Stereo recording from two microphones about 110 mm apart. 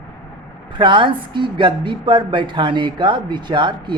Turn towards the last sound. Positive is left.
turn(degrees=-45)  # may be behind; listen again after turning